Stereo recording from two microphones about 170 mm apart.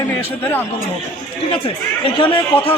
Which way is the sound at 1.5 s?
30° left (ahead or behind).